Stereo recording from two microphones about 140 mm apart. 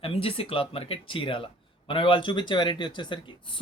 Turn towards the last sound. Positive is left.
turn(degrees=35)  # may be behind; listen again after turning